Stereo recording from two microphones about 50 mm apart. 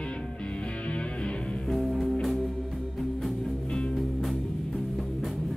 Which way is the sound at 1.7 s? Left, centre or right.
Centre.